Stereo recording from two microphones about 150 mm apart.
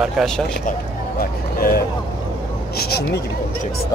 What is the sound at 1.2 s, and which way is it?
Vehicle, 80° left.